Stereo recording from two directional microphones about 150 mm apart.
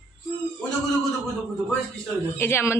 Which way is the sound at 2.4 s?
15° left (ahead or behind).